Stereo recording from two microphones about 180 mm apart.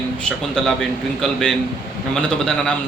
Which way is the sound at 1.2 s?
5° left (ahead or behind).